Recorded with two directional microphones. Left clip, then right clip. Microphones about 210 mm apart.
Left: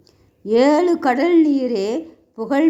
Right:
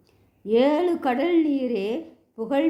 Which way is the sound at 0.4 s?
25° left (ahead or behind).